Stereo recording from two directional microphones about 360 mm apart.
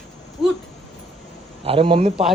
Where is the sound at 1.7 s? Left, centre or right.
Centre.